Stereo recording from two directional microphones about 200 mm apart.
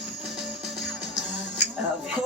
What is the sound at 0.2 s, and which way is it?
Music, centre (ahead or behind).